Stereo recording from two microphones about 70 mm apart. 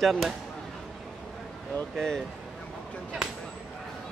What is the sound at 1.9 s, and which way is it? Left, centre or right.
Speech, centre.